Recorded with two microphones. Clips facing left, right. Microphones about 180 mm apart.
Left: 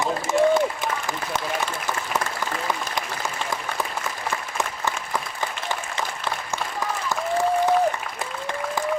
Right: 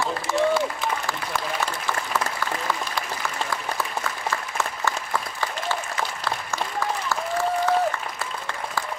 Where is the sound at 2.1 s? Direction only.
20° left (ahead or behind).